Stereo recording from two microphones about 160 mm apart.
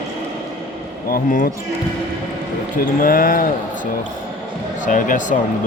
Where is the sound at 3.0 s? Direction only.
60° left (ahead or behind).